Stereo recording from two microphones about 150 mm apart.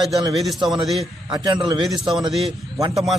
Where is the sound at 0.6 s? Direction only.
30° right (ahead or behind).